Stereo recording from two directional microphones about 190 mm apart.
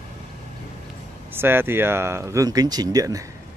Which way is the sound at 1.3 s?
10° right (ahead or behind).